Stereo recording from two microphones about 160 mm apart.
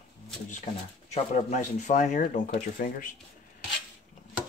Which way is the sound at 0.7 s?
50° left (ahead or behind).